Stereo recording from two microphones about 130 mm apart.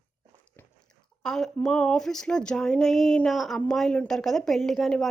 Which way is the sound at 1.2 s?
5° left (ahead or behind).